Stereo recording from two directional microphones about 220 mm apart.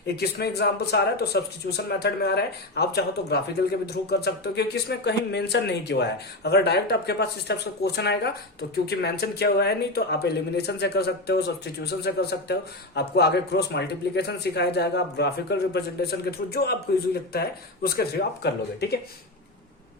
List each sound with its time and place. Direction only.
0.2 s speech: 45° left (ahead or behind)
17.8 s speech: 45° left (ahead or behind)